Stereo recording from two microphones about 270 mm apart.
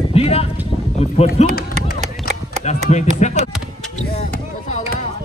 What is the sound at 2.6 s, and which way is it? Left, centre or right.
Speech, left.